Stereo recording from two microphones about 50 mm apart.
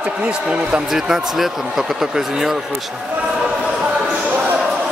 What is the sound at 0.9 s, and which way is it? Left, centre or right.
A man's voice, centre.